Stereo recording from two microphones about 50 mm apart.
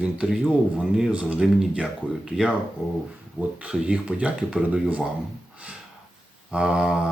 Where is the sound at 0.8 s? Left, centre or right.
Centre.